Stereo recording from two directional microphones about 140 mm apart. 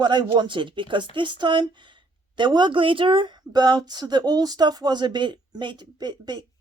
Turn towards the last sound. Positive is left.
turn(degrees=-30)  # may be behind; listen again after turning